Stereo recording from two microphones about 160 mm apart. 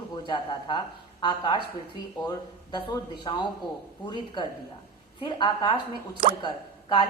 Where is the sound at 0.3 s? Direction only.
30° left (ahead or behind).